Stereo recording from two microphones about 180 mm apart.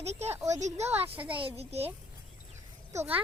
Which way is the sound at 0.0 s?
35° right (ahead or behind).